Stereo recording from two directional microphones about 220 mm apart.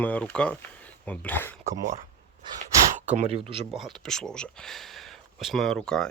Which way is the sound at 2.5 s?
35° right (ahead or behind).